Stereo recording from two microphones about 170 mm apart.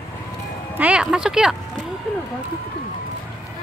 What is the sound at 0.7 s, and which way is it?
Speech, 5° right (ahead or behind).